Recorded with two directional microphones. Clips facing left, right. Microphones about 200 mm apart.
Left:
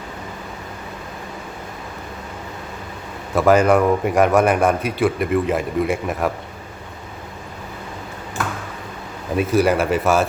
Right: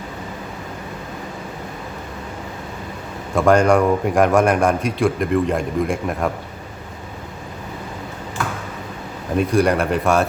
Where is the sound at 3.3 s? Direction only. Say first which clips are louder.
Even; 5° left (ahead or behind).